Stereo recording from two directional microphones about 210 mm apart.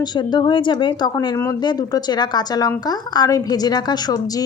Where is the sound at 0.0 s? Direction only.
20° left (ahead or behind).